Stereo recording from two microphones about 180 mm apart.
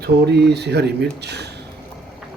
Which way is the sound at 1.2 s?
70° right (ahead or behind).